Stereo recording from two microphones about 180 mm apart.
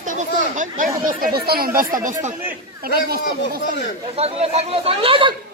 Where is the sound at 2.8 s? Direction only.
55° right (ahead or behind).